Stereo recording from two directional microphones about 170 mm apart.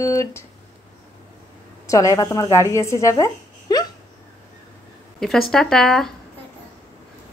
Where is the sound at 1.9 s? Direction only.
20° left (ahead or behind).